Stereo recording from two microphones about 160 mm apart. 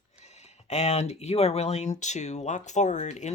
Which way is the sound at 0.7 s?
45° left (ahead or behind).